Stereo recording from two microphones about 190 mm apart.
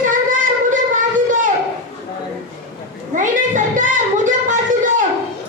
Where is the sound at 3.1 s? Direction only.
40° right (ahead or behind).